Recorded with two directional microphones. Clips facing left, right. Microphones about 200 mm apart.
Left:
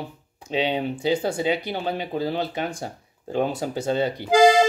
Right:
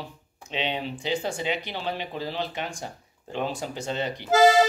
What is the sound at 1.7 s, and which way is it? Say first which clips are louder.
Speech: left 5 dB; 45° left (ahead or behind).